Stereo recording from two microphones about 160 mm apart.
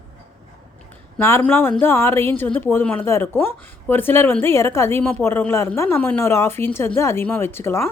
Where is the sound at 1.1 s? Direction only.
10° left (ahead or behind).